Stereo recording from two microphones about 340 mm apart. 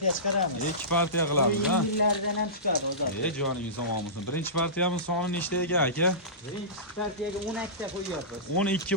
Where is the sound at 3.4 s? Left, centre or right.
Left.